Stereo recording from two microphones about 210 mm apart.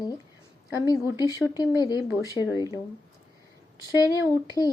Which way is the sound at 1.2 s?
15° left (ahead or behind).